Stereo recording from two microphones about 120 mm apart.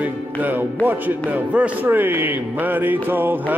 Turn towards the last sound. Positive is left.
turn(degrees=-15)  # may be behind; listen again after turning